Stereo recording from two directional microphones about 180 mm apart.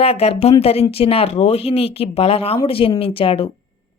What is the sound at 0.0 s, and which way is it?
Speech, 35° left (ahead or behind).